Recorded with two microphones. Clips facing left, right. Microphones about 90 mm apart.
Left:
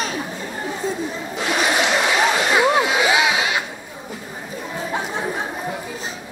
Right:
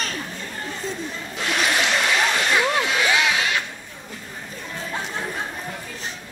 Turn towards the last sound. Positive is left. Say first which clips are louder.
# left 5 dB
turn(degrees=15)  # may be behind; listen again after turning